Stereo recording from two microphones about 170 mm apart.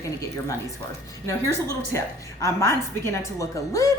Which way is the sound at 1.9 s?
15° left (ahead or behind).